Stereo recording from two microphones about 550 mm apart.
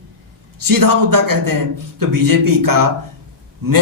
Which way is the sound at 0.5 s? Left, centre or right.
Right.